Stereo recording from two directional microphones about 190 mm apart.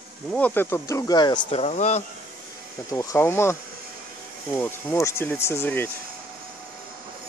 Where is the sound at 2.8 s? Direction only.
15° left (ahead or behind).